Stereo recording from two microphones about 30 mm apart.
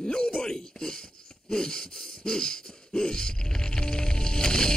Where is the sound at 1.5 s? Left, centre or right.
Left.